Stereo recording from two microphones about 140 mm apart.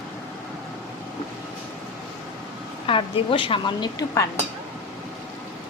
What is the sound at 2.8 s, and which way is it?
A woman's voice, 40° left (ahead or behind).